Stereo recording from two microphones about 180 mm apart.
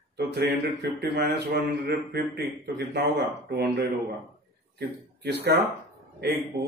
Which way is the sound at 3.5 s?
65° right (ahead or behind).